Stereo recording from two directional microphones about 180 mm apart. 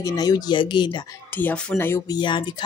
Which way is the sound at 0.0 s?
20° left (ahead or behind).